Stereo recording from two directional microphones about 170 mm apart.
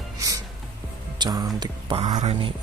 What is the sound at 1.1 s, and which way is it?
Speech, 25° right (ahead or behind).